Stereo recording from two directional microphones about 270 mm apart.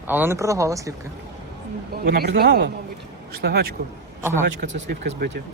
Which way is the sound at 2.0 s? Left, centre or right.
Right.